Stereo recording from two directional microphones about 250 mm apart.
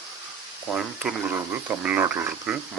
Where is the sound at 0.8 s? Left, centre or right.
Centre.